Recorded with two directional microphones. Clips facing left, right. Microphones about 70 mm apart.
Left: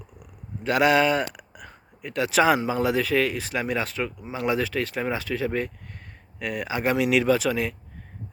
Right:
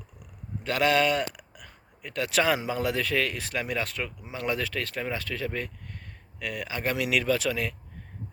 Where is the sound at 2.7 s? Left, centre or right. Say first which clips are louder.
Left 5 dB; centre.